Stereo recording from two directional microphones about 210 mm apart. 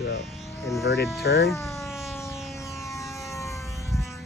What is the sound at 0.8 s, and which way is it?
Speech, 50° left (ahead or behind).